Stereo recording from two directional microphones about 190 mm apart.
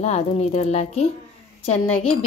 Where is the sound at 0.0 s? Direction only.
35° left (ahead or behind).